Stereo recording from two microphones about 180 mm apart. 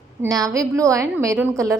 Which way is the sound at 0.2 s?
20° right (ahead or behind).